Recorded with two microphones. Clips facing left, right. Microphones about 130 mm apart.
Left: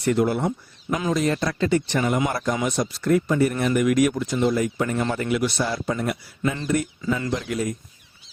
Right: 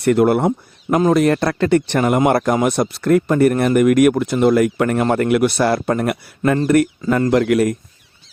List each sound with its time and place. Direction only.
0.0 s speech: 60° right (ahead or behind)